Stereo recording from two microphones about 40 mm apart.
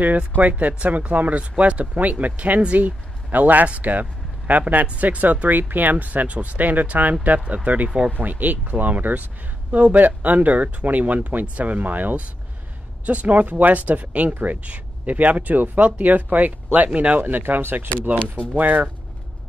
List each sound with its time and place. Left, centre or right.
0.4 s speech: right
3.3 s a man's voice: right
17.2 s speech: right
18.0 s speech: right